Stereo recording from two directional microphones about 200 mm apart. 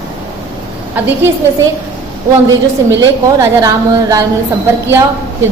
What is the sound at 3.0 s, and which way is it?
A woman's voice, 15° right (ahead or behind).